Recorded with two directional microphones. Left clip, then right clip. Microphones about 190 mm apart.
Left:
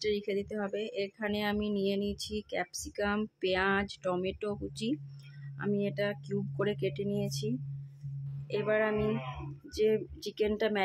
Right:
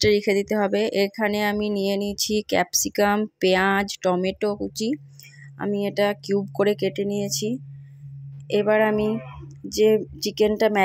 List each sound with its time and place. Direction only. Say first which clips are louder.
0.0 s speech: right 13 dB; 35° right (ahead or behind)